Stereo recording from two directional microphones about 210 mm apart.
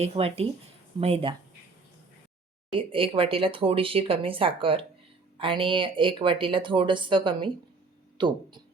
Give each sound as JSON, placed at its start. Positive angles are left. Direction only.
{"t": 0.0, "sound": "speech", "side_deg": -30}
{"t": 2.7, "sound": "speech", "side_deg": -25}